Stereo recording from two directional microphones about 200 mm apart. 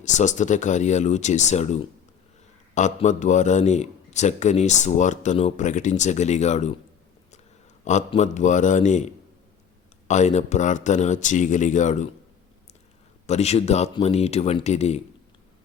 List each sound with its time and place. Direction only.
0.0 s a man's voice: 35° left (ahead or behind)
7.9 s a man's voice: 35° left (ahead or behind)
10.1 s a man's voice: 35° left (ahead or behind)
13.2 s a man's voice: 35° left (ahead or behind)